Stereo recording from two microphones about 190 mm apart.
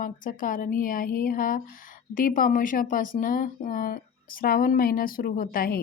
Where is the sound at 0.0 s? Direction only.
45° left (ahead or behind).